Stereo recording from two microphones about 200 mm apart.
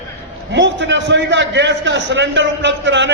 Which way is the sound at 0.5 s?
65° right (ahead or behind).